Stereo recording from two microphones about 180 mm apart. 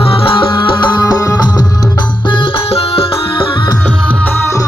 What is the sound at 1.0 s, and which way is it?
Music, 20° left (ahead or behind).